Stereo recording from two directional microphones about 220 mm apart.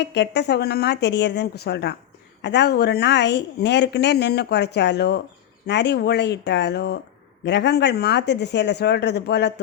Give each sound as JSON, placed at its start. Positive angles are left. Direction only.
{"t": 0.0, "sound": "speech", "side_deg": 50}